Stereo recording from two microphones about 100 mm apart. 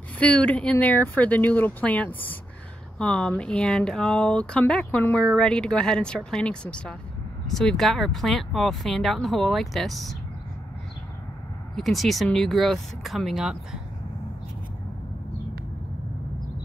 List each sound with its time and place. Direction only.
0.2 s speech: 15° left (ahead or behind)
11.7 s speech: centre (ahead or behind)